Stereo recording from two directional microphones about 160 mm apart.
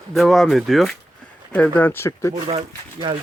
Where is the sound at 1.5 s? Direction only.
10° left (ahead or behind).